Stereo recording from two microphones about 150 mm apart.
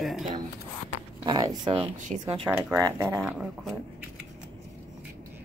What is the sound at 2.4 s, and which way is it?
Speech, 15° right (ahead or behind).